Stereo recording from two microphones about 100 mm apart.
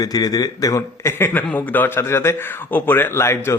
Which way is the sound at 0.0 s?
40° left (ahead or behind).